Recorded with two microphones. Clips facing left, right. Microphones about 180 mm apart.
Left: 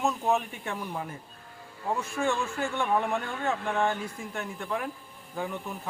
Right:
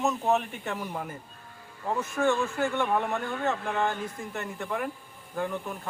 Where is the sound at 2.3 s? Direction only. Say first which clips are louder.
Right 4 dB; centre (ahead or behind).